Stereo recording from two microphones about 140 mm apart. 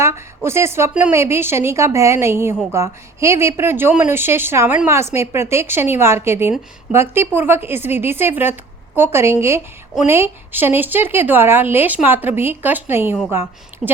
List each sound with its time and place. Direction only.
0.0 s a woman's voice: 20° right (ahead or behind)